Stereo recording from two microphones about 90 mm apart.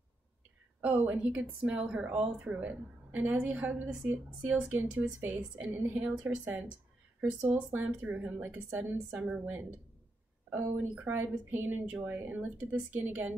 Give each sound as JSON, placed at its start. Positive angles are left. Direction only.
{"t": 0.8, "sound": "a woman's voice", "side_deg": -15}
{"t": 9.1, "sound": "speech", "side_deg": -5}
{"t": 10.5, "sound": "speech", "side_deg": -20}